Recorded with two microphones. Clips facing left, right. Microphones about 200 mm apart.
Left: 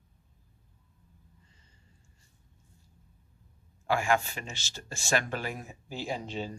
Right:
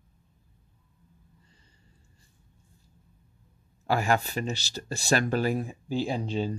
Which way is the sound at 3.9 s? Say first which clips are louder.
Right 2 dB; 35° right (ahead or behind).